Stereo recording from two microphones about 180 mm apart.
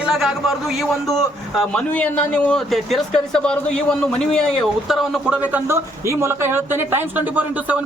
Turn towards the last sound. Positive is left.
turn(degrees=-10)  # may be behind; listen again after turning